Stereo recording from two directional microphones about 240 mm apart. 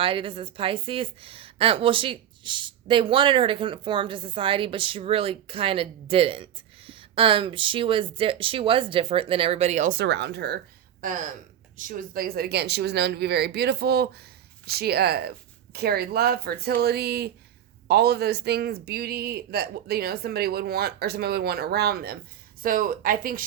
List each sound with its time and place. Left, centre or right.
0.0 s a woman's voice: right
10.0 s speech: right
11.0 s speech: right